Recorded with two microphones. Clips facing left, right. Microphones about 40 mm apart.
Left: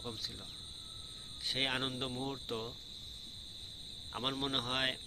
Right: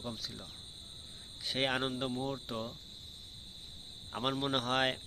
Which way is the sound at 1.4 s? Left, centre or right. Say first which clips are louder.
Right 3 dB; centre.